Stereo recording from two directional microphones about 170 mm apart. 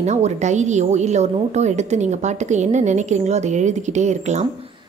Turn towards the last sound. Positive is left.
turn(degrees=-40)  # may be behind; listen again after turning